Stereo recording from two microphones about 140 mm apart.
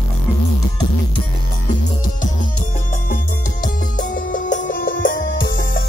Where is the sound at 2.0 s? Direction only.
70° left (ahead or behind).